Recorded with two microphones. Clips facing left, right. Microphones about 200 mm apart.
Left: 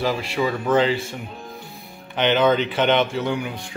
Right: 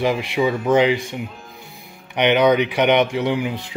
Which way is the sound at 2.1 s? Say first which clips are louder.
Right 3 dB; 15° right (ahead or behind).